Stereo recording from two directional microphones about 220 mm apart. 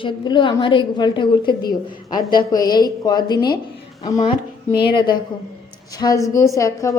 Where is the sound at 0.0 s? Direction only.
20° left (ahead or behind).